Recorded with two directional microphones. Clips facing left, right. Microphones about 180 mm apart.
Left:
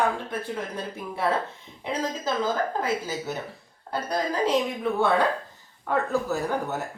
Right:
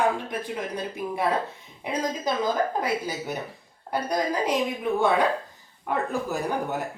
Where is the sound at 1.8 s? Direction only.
15° right (ahead or behind).